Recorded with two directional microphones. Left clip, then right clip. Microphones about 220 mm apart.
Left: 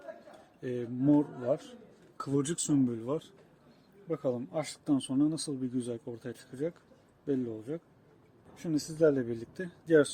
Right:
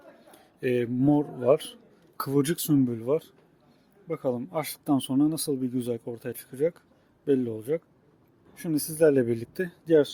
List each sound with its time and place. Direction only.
0.3 s a man's voice: 40° right (ahead or behind)
8.5 s speech: 30° right (ahead or behind)